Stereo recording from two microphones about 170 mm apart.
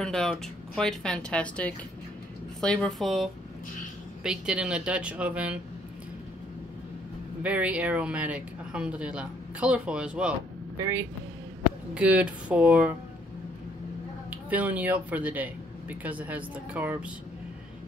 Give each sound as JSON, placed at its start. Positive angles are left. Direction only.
{"t": 0.0, "sound": "speech", "side_deg": 5}
{"t": 7.4, "sound": "speech", "side_deg": -10}
{"t": 10.8, "sound": "speech", "side_deg": -15}
{"t": 14.3, "sound": "speech", "side_deg": -10}